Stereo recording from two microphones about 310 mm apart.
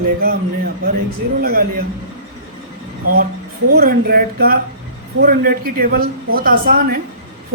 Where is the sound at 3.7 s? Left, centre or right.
Right.